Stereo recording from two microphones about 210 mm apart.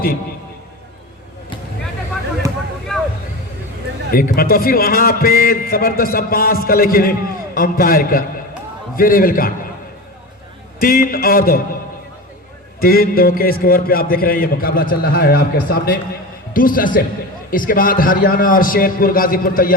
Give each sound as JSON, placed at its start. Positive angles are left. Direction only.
{"t": 4.1, "sound": "a man's voice", "side_deg": 45}
{"t": 10.8, "sound": "a man's voice", "side_deg": 45}
{"t": 12.8, "sound": "a man's voice", "side_deg": 45}